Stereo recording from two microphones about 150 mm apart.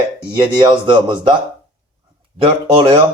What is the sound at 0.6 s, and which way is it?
Speech, 30° right (ahead or behind).